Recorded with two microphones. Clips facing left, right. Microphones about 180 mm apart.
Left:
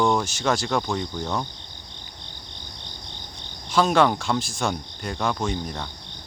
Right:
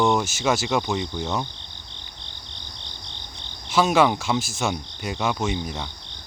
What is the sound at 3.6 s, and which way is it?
Speech, 5° right (ahead or behind).